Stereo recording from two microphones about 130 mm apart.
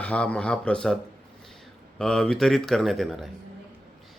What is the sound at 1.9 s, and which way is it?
Speech, 5° left (ahead or behind).